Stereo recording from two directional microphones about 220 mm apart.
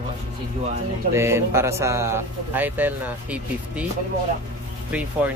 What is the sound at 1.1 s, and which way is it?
A man's voice, 10° right (ahead or behind).